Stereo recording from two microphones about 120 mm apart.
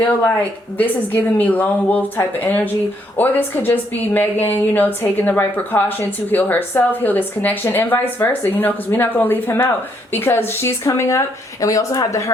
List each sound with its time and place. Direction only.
0.0 s a woman's voice: 15° left (ahead or behind)